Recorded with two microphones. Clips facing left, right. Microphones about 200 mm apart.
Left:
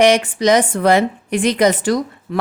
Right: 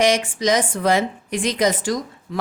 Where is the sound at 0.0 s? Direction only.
65° left (ahead or behind).